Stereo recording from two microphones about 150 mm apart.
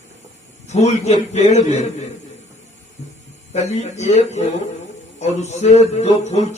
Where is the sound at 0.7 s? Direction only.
45° left (ahead or behind).